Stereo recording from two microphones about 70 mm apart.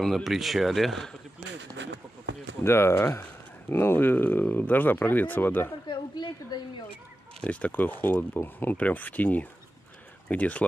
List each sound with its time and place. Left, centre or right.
0.0 s speech: centre
2.6 s speech: left
5.9 s a sound: left
7.4 s speech: left